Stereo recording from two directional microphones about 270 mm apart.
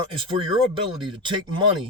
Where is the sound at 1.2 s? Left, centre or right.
Centre.